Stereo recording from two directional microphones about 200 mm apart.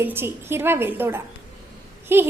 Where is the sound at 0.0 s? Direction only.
10° right (ahead or behind).